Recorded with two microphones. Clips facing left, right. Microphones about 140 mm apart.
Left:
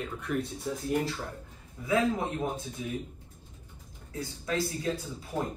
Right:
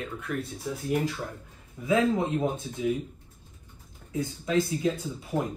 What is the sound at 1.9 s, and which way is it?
Speech, 20° right (ahead or behind).